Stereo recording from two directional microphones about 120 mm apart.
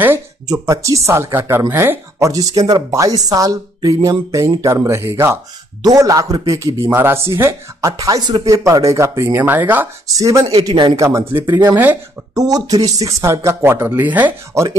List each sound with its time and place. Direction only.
0.5 s speech: 25° right (ahead or behind)
10.0 s speech: 30° right (ahead or behind)
10.7 s speech: 40° right (ahead or behind)
11.0 s speech: 25° right (ahead or behind)
12.4 s speech: 30° right (ahead or behind); by 14.3 s 15° right (ahead or behind)